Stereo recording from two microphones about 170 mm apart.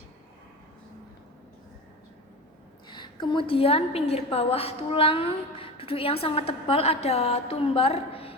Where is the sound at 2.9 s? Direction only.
25° left (ahead or behind).